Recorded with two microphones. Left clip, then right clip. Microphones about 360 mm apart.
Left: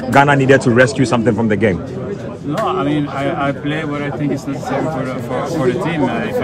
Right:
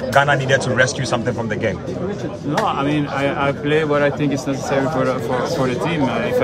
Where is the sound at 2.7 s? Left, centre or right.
Centre.